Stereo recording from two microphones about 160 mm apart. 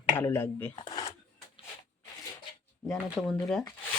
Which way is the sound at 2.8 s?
Centre (ahead or behind).